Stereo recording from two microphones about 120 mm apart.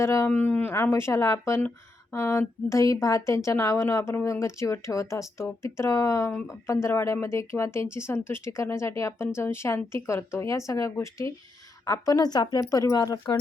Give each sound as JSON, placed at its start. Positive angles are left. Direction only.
{"t": 0.0, "sound": "a woman's voice", "side_deg": 25}